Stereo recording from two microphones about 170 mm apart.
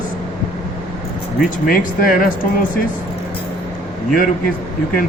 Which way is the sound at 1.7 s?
55° left (ahead or behind).